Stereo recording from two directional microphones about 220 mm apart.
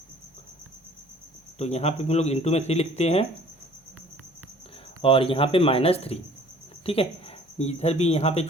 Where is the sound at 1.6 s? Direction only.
30° left (ahead or behind).